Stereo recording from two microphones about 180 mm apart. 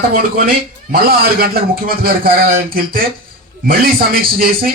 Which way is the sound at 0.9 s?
55° right (ahead or behind).